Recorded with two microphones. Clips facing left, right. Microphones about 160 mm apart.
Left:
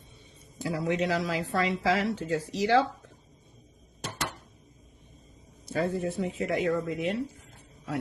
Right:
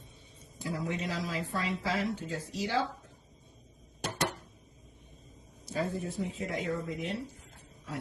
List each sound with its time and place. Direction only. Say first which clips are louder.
0.6 s speech: left 7 dB; 80° left
5.6 s speech: left 5 dB; 65° left (ahead or behind)